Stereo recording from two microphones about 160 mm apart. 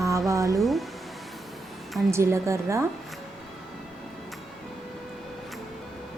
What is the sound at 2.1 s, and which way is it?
Speech, 15° right (ahead or behind).